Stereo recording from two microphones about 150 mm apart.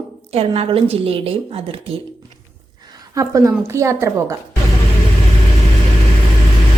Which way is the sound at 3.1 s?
20° right (ahead or behind).